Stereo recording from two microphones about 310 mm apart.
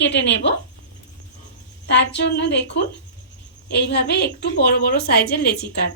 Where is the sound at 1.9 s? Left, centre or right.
Left.